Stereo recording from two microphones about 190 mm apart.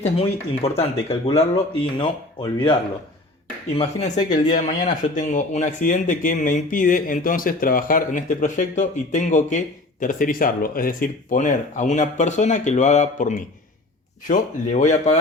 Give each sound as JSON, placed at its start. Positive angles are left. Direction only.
{"t": 0.0, "sound": "speech", "side_deg": 30}
{"t": 4.3, "sound": "speech", "side_deg": 35}